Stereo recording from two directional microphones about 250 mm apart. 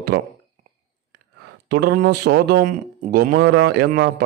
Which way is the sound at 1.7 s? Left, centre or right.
Right.